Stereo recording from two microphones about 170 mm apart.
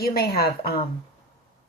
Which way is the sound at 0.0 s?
65° left (ahead or behind).